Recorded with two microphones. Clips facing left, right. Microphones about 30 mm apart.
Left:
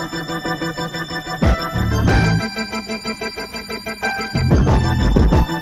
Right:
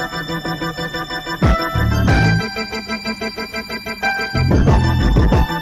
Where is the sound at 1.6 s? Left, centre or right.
Centre.